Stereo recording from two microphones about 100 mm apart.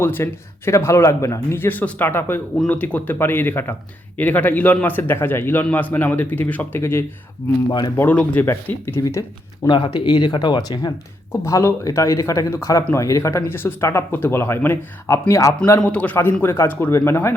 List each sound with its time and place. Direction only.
0.0 s speech: 25° left (ahead or behind)
7.7 s speech: 45° left (ahead or behind)
7.9 s speech: 15° left (ahead or behind)
9.0 s speech: 35° left (ahead or behind)
9.6 s speech: 50° left (ahead or behind)
11.3 s speech: 30° left (ahead or behind)
15.8 s speech: 10° left (ahead or behind)
16.4 s speech: 25° left (ahead or behind)